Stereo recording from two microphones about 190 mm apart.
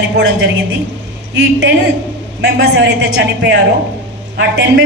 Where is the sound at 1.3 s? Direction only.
65° right (ahead or behind).